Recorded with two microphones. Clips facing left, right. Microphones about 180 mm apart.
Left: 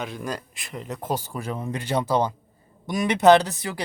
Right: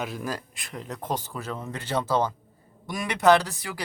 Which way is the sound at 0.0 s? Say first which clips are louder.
Left 1 dB; 5° right (ahead or behind).